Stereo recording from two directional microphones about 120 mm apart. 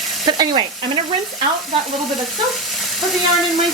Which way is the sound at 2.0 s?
Centre (ahead or behind).